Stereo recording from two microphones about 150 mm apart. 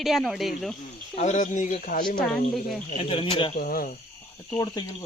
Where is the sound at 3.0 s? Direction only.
35° left (ahead or behind).